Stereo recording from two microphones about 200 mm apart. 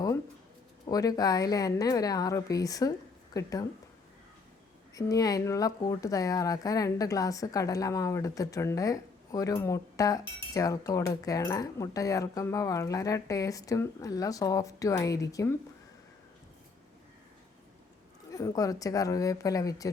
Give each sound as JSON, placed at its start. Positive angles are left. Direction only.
{"t": 0.9, "sound": "a woman's voice", "side_deg": 20}
{"t": 4.9, "sound": "speech", "side_deg": 15}
{"t": 18.3, "sound": "speech", "side_deg": 15}